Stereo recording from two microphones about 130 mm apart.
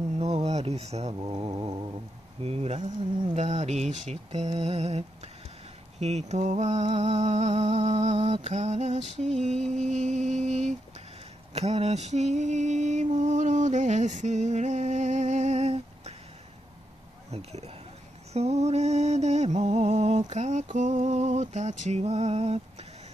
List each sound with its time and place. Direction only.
0.2 s a sound: 55° right (ahead or behind)
1.1 s mantra: 35° right (ahead or behind)
2.4 s speech: 50° right (ahead or behind)
3.3 s mantra: 60° right (ahead or behind)
17.3 s mantra: 55° right (ahead or behind)